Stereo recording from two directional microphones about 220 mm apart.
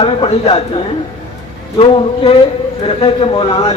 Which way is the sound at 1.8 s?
25° left (ahead or behind).